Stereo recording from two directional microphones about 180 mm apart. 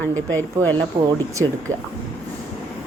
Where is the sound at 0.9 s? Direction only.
30° right (ahead or behind).